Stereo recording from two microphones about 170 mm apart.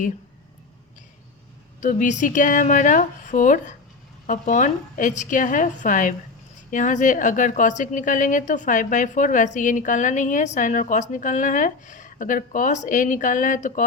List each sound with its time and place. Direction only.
1.8 s a woman's voice: 50° left (ahead or behind)